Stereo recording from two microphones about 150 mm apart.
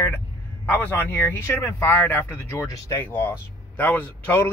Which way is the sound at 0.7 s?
15° left (ahead or behind).